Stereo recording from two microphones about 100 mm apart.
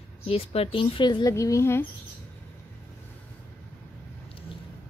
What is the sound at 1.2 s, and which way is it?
Speech, 30° left (ahead or behind).